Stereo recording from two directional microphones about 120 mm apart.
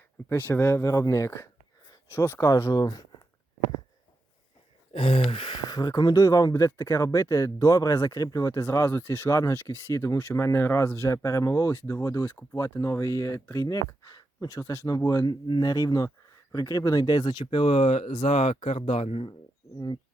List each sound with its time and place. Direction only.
0.3 s speech: 15° left (ahead or behind); by 3.1 s 35° left (ahead or behind)
4.9 s speech: 50° left (ahead or behind)
17.4 s speech: 50° left (ahead or behind)